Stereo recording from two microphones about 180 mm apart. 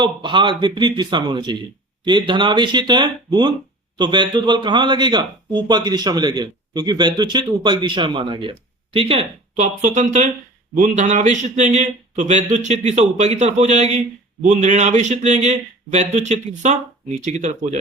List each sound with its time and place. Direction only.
0.0 s a man's voice: 25° right (ahead or behind); by 17.7 s 40° right (ahead or behind)